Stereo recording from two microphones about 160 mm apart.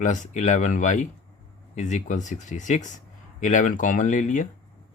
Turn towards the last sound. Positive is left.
turn(degrees=50)  # may be behind; listen again after turning